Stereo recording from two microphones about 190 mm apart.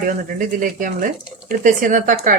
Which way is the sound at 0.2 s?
45° right (ahead or behind).